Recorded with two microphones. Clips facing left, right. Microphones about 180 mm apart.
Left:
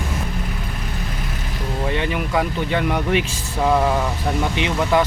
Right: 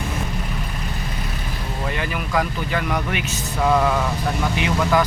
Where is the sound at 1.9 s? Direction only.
25° left (ahead or behind).